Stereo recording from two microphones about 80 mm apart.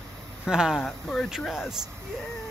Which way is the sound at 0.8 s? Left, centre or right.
Centre.